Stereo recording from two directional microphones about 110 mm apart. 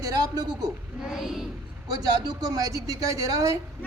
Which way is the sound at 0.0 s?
35° right (ahead or behind).